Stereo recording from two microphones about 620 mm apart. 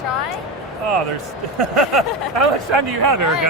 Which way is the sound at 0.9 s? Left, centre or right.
Right.